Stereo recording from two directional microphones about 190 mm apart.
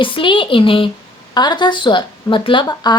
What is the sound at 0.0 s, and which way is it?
A woman's voice, 25° left (ahead or behind).